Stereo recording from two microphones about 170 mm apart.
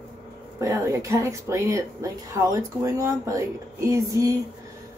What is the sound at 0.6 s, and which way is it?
Speech, 20° right (ahead or behind).